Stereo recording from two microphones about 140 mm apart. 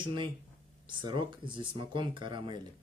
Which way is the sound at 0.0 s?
35° right (ahead or behind).